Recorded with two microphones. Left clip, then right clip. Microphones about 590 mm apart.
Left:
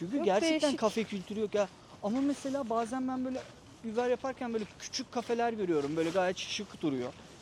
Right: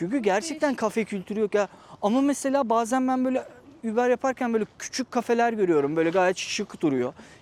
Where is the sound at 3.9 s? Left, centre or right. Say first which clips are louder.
Right 9 dB; right.